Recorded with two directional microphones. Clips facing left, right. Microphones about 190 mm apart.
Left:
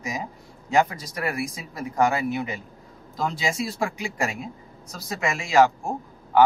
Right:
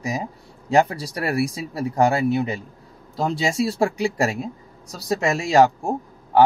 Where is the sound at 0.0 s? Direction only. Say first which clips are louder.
Right 4 dB; 35° right (ahead or behind).